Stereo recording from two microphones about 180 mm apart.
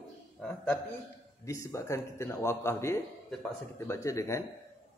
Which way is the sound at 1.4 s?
15° left (ahead or behind).